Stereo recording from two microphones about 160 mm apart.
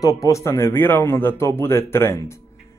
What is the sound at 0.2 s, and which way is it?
Speech, 20° left (ahead or behind).